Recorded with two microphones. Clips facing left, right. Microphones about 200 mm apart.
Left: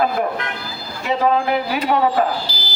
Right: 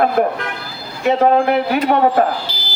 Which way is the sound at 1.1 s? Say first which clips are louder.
Right 5 dB; 55° right (ahead or behind).